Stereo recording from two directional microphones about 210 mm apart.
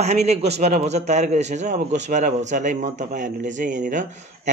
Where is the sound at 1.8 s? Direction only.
50° right (ahead or behind).